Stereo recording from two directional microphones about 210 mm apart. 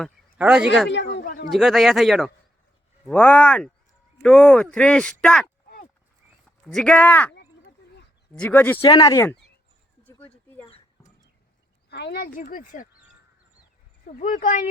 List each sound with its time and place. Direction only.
0.3 s speech: 5° right (ahead or behind)
0.9 s speech: 55° left (ahead or behind)
1.2 s speech: 40° left (ahead or behind)
1.5 s speech: centre (ahead or behind)
6.7 s speech: 5° left (ahead or behind)
7.3 s a sound: 55° left (ahead or behind)
8.3 s speech: 10° left (ahead or behind)
8.8 s speech: 20° left (ahead or behind)
10.0 s a sound: 5° left (ahead or behind)
11.9 s speech: 50° left (ahead or behind)
12.4 s speech: 40° left (ahead or behind)
14.2 s speech: 40° left (ahead or behind)